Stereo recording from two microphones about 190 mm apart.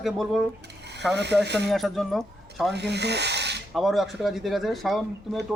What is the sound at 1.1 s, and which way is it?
Speech, 60° right (ahead or behind).